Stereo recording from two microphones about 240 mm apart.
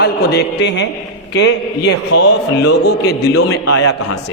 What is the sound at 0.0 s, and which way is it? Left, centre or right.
A man's voice, left.